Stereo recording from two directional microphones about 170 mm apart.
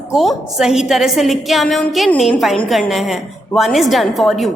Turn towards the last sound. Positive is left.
turn(degrees=0)  # may be behind; listen again after turning